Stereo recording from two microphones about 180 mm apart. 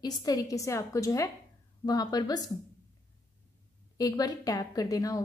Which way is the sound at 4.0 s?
20° left (ahead or behind).